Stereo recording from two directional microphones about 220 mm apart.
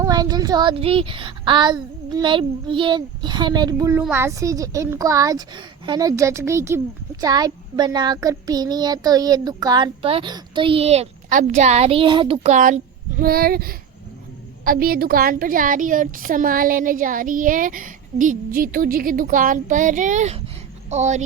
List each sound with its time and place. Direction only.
0.0 s a woman's voice: 15° right (ahead or behind)